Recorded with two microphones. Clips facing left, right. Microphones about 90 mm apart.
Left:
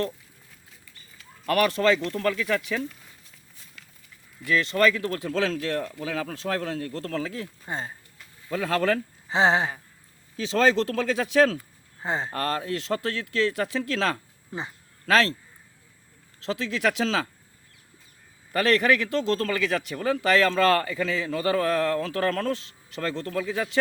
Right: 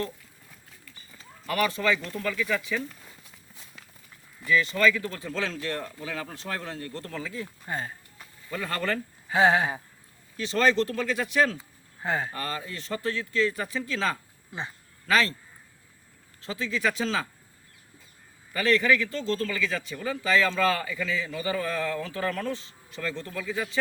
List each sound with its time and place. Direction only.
1.5 s speech: 70° left (ahead or behind)
4.4 s speech: 70° left (ahead or behind); by 7.4 s 90° left
7.7 s a sound: 25° left (ahead or behind)
8.4 s speech: 90° left
9.3 s a sound: 25° left (ahead or behind)
10.9 s speech: 90° left
12.0 s a sound: 25° left (ahead or behind)
12.3 s speech: 70° left (ahead or behind); by 14.2 s 90° left
14.5 s speech: 35° left (ahead or behind)
15.0 s speech: 90° left
16.4 s speech: 90° left
18.5 s speech: 65° left (ahead or behind); by 23.7 s 90° left